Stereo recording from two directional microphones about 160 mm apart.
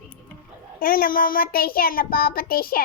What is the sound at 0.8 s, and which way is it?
Child singing, 65° left (ahead or behind).